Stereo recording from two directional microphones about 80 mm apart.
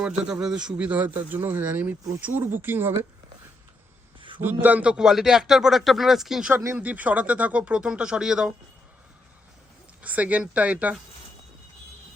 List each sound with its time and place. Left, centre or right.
0.0 s a man's voice: centre; by 3.1 s right
4.4 s a man's voice: right; by 6.5 s centre
6.5 s speech: right
6.7 s speech: centre
10.0 s speech: centre